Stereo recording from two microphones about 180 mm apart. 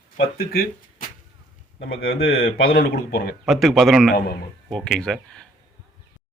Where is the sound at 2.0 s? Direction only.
60° left (ahead or behind).